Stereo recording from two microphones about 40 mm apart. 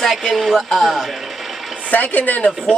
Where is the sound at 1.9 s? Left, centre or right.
Left.